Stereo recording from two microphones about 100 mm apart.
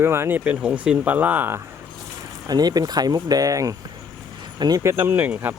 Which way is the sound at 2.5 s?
40° right (ahead or behind).